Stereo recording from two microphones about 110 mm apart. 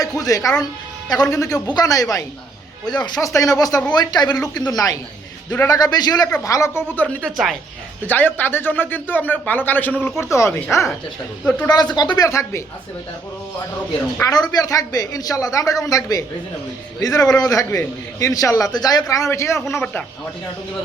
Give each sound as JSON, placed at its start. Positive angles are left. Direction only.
{"t": 0.2, "sound": "a woman's voice", "side_deg": 30}
{"t": 11.4, "sound": "speech", "side_deg": 10}
{"t": 11.7, "sound": "a woman's voice", "side_deg": 40}
{"t": 14.3, "sound": "a woman's voice", "side_deg": 35}
{"t": 19.8, "sound": "speech", "side_deg": 10}